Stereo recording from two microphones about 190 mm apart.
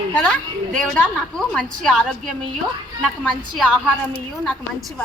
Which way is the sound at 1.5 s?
Centre (ahead or behind).